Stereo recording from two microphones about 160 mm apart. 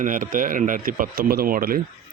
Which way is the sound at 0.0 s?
55° right (ahead or behind).